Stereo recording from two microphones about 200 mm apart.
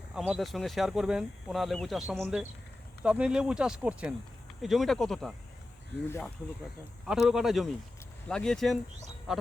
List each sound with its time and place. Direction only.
0.1 s speech: centre (ahead or behind)
7.1 s speech: 5° right (ahead or behind)
9.3 s a sound: 5° right (ahead or behind)